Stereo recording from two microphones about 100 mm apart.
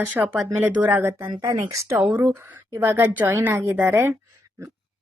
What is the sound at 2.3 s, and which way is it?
Speech, 25° right (ahead or behind).